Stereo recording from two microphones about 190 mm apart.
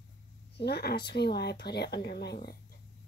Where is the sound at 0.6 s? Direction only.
60° left (ahead or behind).